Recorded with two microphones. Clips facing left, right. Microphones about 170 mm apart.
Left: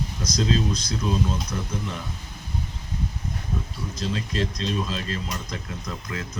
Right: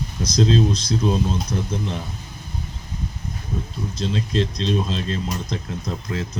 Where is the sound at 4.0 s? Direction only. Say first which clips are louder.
Right 4 dB; 30° right (ahead or behind).